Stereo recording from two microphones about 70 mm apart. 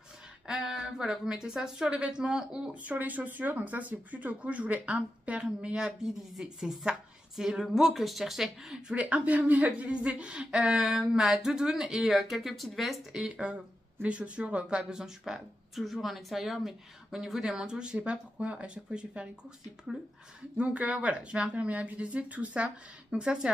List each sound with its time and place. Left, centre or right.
0.5 s speech: centre
2.8 s speech: right; by 8.9 s centre
8.9 s speech: right
20.5 s speech: centre